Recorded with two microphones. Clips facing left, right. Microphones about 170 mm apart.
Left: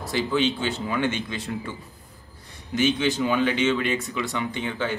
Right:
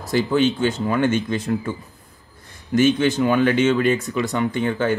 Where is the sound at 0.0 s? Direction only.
45° right (ahead or behind).